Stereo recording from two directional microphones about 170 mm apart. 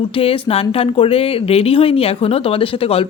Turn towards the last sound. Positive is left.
turn(degrees=35)  # may be behind; listen again after turning